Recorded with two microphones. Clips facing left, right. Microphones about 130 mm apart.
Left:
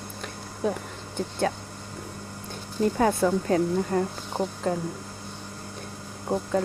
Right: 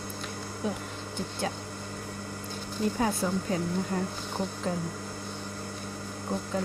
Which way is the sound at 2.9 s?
50° left (ahead or behind).